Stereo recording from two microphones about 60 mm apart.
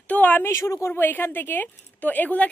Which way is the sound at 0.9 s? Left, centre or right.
Left.